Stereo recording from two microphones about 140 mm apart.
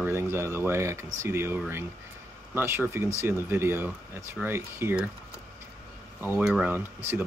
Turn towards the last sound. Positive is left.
turn(degrees=-15)  # may be behind; listen again after turning